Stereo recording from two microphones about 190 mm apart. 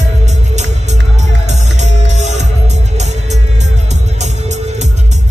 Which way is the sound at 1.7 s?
40° right (ahead or behind).